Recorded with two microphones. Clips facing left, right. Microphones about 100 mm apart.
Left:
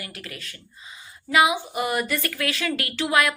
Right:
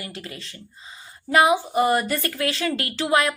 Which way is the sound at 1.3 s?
40° right (ahead or behind).